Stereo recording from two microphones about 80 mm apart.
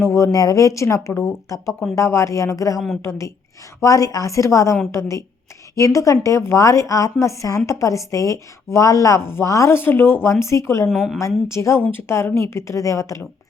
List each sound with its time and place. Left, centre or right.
0.0 s a woman's voice: left
0.3 s a woman's voice: left
2.7 s a woman's voice: centre
3.0 s a woman's voice: left
10.8 s a woman's voice: centre
11.4 s a woman's voice: left